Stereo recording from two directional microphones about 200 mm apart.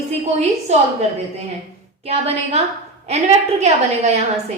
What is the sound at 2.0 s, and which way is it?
A woman's voice, 30° right (ahead or behind).